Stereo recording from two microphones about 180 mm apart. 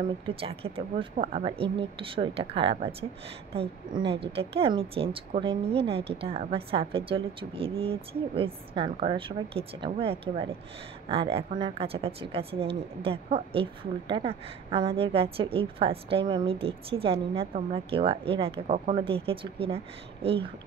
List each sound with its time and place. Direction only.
0.0 s a woman's voice: 30° right (ahead or behind)